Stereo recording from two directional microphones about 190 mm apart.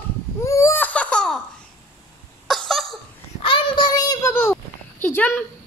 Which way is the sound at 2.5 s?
Centre (ahead or behind).